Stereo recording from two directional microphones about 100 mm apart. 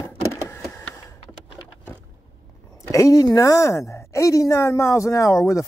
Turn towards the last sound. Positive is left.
turn(degrees=30)  # may be behind; listen again after turning